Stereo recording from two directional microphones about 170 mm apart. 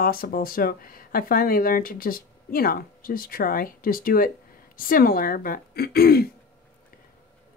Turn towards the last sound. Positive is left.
turn(degrees=65)  # may be behind; listen again after turning